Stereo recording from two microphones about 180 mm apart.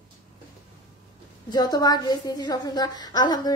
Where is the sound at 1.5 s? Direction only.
20° left (ahead or behind).